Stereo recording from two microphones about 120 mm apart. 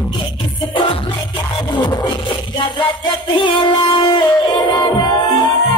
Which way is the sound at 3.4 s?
40° left (ahead or behind).